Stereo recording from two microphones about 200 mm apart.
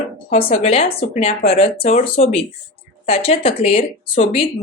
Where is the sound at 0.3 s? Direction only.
30° left (ahead or behind).